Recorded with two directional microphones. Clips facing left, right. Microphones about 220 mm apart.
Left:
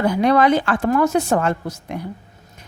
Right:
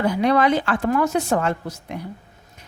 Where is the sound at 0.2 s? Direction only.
45° left (ahead or behind).